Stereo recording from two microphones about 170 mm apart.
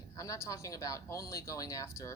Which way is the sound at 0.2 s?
20° left (ahead or behind).